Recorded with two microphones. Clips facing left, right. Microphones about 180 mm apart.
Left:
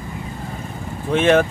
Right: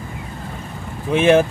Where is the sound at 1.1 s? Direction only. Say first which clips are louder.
Right 2 dB; 10° right (ahead or behind).